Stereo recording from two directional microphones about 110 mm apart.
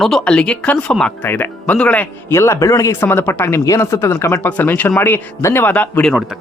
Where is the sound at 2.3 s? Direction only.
25° left (ahead or behind).